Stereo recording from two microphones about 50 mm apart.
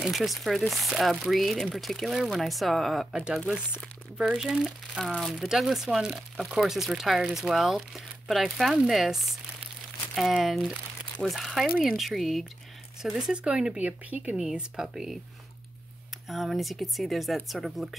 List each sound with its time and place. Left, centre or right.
0.0 s speech: centre
4.2 s speech: centre
4.6 s speech: centre
10.4 s speech: centre
13.3 s speech: centre
13.7 s speech: right
14.3 s speech: centre
16.3 s speech: centre